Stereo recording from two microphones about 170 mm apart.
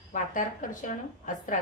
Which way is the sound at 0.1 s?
50° left (ahead or behind).